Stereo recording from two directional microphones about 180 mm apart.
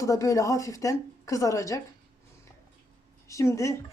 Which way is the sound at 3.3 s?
15° left (ahead or behind).